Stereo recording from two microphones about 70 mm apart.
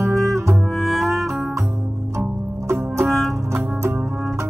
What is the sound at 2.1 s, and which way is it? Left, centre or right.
Music, right.